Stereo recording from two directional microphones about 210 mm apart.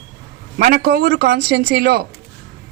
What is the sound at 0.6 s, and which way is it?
Speech, 50° right (ahead or behind).